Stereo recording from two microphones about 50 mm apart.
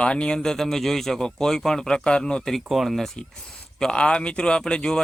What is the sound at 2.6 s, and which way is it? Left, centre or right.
Speech, centre.